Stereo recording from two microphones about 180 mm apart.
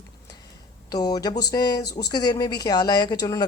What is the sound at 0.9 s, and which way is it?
Speech, 20° left (ahead or behind).